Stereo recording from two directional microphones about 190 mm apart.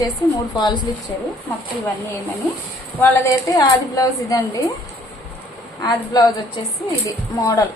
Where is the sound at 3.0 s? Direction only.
15° left (ahead or behind).